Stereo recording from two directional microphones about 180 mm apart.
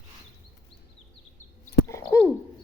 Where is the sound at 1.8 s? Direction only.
15° left (ahead or behind).